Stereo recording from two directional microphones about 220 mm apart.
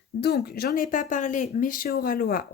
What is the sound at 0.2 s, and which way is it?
Speech, 45° left (ahead or behind).